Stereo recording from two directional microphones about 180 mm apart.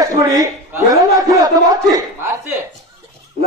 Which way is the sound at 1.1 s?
20° right (ahead or behind).